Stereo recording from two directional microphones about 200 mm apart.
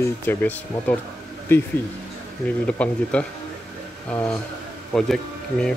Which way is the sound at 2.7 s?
5° left (ahead or behind).